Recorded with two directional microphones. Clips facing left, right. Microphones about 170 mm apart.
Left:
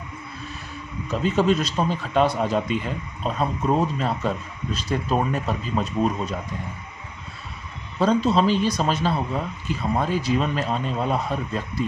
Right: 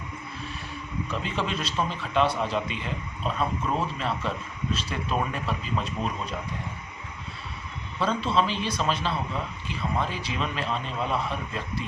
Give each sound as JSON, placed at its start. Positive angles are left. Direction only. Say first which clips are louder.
{"t": 1.0, "sound": "speech", "louder": "left 11 dB", "side_deg": 40}
{"t": 7.9, "sound": "speech", "louder": "left 6 dB", "side_deg": 45}